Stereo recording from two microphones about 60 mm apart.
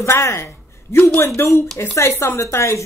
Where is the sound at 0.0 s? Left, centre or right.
Left.